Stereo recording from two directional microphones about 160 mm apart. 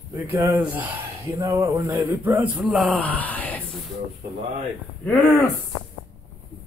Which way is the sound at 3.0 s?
10° left (ahead or behind).